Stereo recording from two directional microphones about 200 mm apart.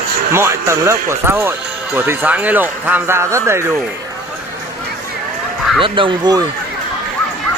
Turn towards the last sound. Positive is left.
turn(degrees=-25)  # may be behind; listen again after turning